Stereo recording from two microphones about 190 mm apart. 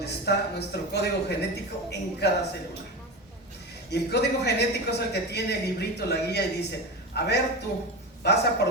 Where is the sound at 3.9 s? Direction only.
60° left (ahead or behind).